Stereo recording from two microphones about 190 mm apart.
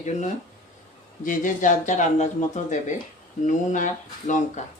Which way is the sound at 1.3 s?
45° left (ahead or behind).